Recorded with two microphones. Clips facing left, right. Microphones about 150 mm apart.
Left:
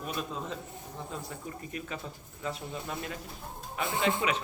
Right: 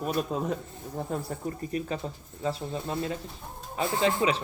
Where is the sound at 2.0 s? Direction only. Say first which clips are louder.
Right 6 dB; 30° right (ahead or behind).